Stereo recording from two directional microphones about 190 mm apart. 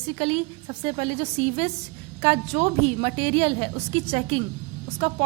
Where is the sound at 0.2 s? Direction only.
30° right (ahead or behind).